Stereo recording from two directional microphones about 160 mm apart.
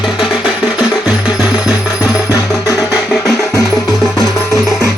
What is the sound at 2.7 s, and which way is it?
Music, centre (ahead or behind).